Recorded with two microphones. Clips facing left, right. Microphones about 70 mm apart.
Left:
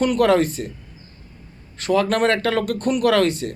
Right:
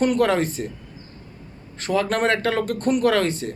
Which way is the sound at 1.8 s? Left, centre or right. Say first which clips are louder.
Left 3 dB; right.